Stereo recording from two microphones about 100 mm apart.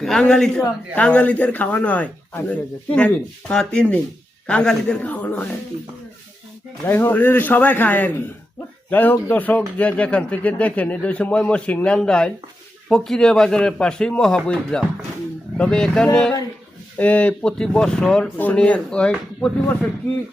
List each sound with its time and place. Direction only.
0.0 s speech: 5° left (ahead or behind)
6.8 s speech: 20° left (ahead or behind)